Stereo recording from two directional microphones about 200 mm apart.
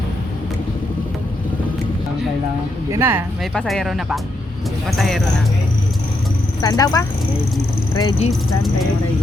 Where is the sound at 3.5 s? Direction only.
Centre (ahead or behind).